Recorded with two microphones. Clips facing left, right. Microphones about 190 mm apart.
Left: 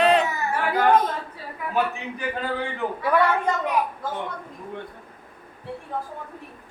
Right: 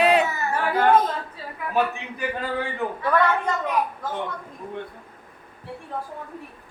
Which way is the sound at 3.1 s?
10° left (ahead or behind).